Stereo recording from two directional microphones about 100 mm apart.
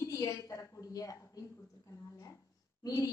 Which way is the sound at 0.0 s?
35° left (ahead or behind).